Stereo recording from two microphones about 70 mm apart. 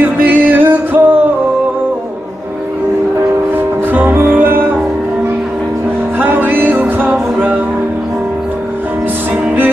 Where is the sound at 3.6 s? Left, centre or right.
Right.